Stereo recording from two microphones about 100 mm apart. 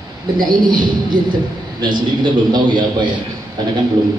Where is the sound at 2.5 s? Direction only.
50° right (ahead or behind).